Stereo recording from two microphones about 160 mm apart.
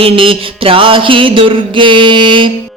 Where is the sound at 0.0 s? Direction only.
35° right (ahead or behind).